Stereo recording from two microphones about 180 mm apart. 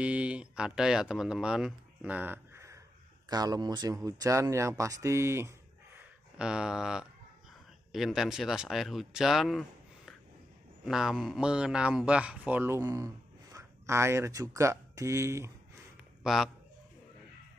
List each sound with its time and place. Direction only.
0.0 s speech: 5° right (ahead or behind)
6.3 s speech: 5° right (ahead or behind)
16.2 s speech: 5° right (ahead or behind)